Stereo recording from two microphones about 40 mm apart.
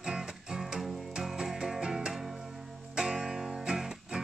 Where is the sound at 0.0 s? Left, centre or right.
Centre.